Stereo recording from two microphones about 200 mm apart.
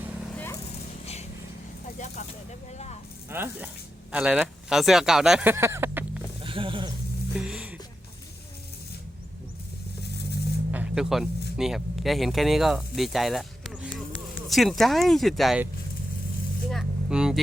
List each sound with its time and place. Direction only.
0.3 s vehicle: 10° left (ahead or behind)
2.7 s snake: 35° left (ahead or behind)
3.2 s speech: 10° right (ahead or behind)
6.4 s wild animals: 25° right (ahead or behind)
7.3 s music: 5° right (ahead or behind)
10.7 s music: 5° right (ahead or behind)
11.5 s speech: centre (ahead or behind)